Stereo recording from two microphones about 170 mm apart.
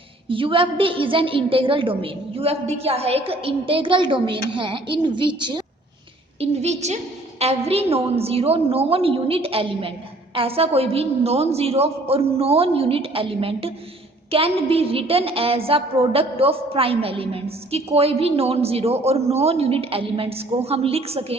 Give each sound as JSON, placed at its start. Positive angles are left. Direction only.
{"t": 0.3, "sound": "a woman's voice", "side_deg": -30}
{"t": 6.4, "sound": "a woman's voice", "side_deg": -40}